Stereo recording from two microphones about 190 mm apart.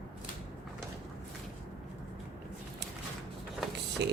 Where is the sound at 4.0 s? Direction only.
65° right (ahead or behind).